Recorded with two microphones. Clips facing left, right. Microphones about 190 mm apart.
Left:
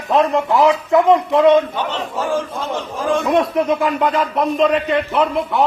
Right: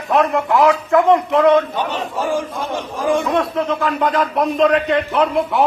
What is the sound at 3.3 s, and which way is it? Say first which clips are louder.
Speech: left 3 dB; 15° left (ahead or behind).